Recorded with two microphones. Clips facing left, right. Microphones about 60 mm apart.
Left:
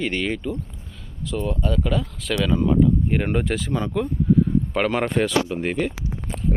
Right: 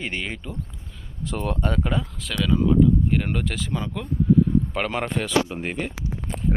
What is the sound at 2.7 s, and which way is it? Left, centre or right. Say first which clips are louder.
Speech: even; centre.